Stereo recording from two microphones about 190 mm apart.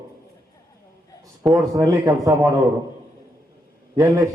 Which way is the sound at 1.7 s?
15° right (ahead or behind).